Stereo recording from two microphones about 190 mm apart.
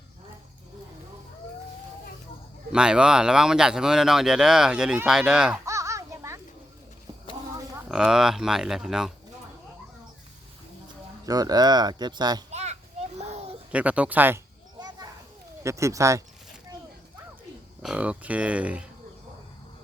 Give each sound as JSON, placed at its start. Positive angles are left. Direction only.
{"t": 2.7, "sound": "speech", "side_deg": -5}
{"t": 5.6, "sound": "children playing", "side_deg": -15}
{"t": 7.9, "sound": "speech", "side_deg": -5}
{"t": 11.3, "sound": "speech", "side_deg": -20}
{"t": 12.5, "sound": "children playing", "side_deg": -35}
{"t": 13.7, "sound": "speech", "side_deg": -5}
{"t": 14.8, "sound": "children playing", "side_deg": -20}
{"t": 15.6, "sound": "speech", "side_deg": -15}
{"t": 17.8, "sound": "speech", "side_deg": -5}